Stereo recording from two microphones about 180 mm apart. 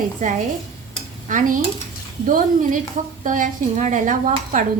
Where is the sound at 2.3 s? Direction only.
45° right (ahead or behind).